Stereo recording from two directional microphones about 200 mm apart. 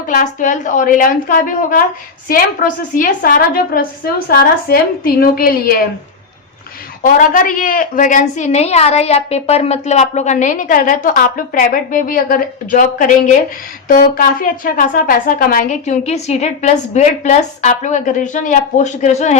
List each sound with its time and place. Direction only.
0.1 s a woman's voice: 40° left (ahead or behind)
7.0 s a woman's voice: 40° left (ahead or behind)